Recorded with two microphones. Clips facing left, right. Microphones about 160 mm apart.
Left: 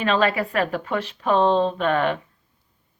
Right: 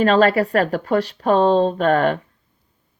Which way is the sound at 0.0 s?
40° right (ahead or behind).